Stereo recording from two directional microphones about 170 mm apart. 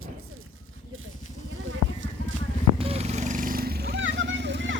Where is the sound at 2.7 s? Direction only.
35° right (ahead or behind).